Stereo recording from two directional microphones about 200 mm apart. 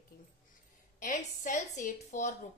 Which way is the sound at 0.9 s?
40° left (ahead or behind).